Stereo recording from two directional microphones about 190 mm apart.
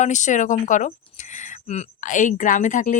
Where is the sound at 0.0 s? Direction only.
40° left (ahead or behind).